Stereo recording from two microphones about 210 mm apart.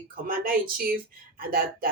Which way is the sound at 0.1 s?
45° right (ahead or behind).